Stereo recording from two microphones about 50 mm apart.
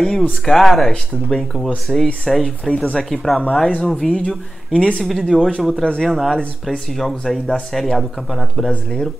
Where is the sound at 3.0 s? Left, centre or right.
Centre.